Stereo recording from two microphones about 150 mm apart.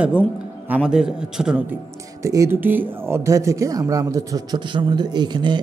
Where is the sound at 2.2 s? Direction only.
20° right (ahead or behind).